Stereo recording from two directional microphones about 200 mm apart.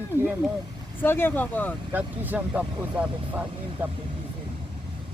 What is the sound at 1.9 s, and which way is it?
Speech, 10° right (ahead or behind).